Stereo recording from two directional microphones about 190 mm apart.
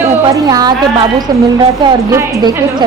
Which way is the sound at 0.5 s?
20° right (ahead or behind).